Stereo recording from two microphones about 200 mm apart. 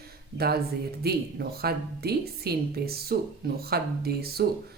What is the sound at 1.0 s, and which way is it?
Speech, 50° right (ahead or behind).